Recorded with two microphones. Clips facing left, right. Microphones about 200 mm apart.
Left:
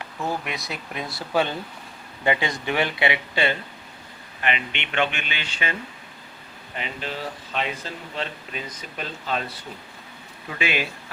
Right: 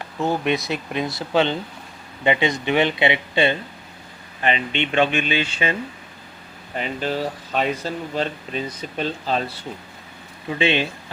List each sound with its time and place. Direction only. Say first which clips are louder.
0.2 s speech: right 8 dB; 25° right (ahead or behind)
6.7 s speech: right 7 dB; 40° right (ahead or behind)